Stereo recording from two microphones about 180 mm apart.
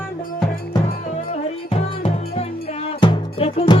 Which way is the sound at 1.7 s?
35° left (ahead or behind).